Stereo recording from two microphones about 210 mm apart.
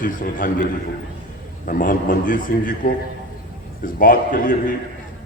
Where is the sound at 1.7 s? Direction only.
40° left (ahead or behind).